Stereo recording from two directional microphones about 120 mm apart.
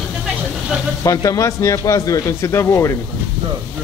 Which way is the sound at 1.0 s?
30° left (ahead or behind).